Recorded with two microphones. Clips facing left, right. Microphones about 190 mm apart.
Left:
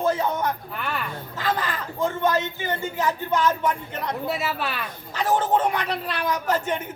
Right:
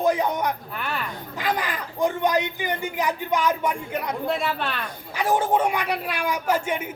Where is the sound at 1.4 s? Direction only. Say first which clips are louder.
Even; 15° right (ahead or behind).